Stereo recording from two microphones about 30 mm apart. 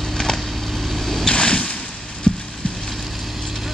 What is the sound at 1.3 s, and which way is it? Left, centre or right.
Boat, left.